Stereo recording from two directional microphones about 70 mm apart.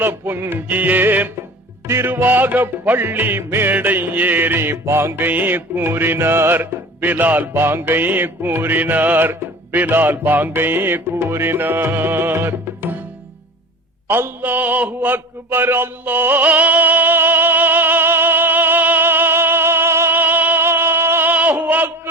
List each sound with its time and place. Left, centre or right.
0.0 s music: right
1.9 s music: right
5.1 s music: right
14.1 s mantra: right